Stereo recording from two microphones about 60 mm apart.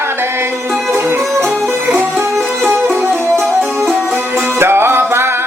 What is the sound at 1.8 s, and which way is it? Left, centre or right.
Music, right.